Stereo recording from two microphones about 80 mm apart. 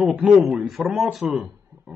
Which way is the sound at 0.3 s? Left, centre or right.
Centre.